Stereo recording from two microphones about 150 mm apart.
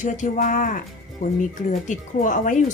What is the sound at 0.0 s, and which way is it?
Speech, 55° left (ahead or behind).